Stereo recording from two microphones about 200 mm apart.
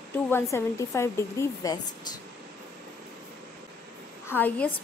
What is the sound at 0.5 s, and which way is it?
Speech, 15° left (ahead or behind).